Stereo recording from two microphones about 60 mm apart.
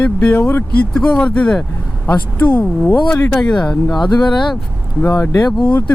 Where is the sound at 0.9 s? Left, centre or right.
Centre.